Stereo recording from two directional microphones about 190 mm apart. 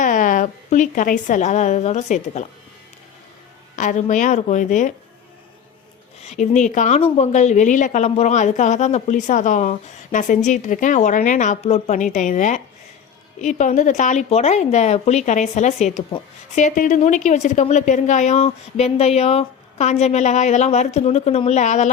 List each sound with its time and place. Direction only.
0.0 s a woman's voice: 45° left (ahead or behind)
3.8 s a woman's voice: 40° left (ahead or behind)
6.2 s a woman's voice: 40° left (ahead or behind)